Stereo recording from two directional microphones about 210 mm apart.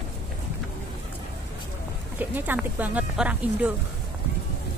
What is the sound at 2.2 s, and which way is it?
Speech, 10° right (ahead or behind).